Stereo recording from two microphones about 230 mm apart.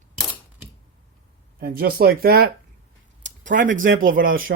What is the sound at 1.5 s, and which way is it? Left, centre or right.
Speech, right.